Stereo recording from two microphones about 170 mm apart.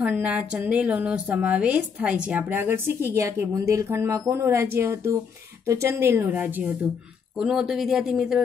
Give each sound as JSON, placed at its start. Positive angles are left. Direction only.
{"t": 0.0, "sound": "a woman's voice", "side_deg": -10}